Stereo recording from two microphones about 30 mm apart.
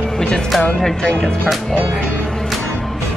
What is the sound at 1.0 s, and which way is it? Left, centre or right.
Speech, left.